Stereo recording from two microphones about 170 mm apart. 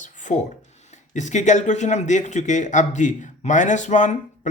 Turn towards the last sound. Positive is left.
turn(degrees=45)  # may be behind; listen again after turning